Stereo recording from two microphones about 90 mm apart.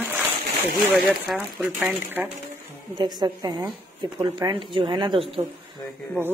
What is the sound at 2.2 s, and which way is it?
Speech, 20° right (ahead or behind).